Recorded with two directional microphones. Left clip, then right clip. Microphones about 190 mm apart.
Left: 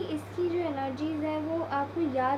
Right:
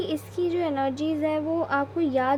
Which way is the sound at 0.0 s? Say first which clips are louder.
Right 4 dB; 45° right (ahead or behind).